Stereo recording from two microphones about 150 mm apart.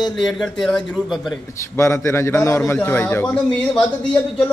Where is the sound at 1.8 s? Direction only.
20° left (ahead or behind).